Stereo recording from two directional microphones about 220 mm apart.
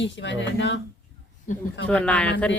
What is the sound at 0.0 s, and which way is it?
Speech, 55° left (ahead or behind).